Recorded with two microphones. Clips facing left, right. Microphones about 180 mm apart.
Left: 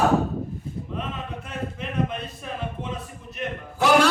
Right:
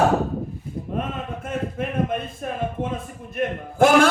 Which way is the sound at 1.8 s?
50° right (ahead or behind).